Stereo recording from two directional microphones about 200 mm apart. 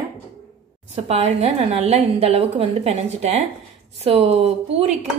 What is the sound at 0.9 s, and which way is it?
A woman's voice, 30° right (ahead or behind).